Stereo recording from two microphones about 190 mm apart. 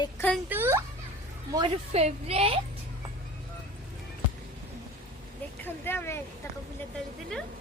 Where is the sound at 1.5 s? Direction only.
30° right (ahead or behind).